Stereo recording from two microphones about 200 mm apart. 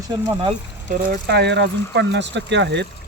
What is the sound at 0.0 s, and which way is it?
Speech, 25° right (ahead or behind).